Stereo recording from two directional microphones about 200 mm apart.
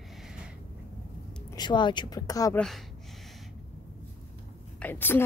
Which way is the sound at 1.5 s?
20° left (ahead or behind).